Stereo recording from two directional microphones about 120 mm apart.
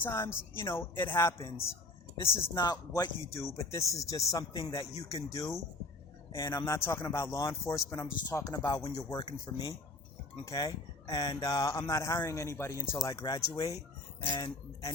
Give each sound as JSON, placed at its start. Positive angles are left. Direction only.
{"t": 0.0, "sound": "speech", "side_deg": 20}
{"t": 2.1, "sound": "speech", "side_deg": 50}
{"t": 2.6, "sound": "speech", "side_deg": 35}